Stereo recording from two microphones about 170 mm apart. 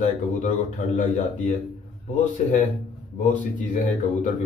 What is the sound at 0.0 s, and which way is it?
Speech, 50° left (ahead or behind).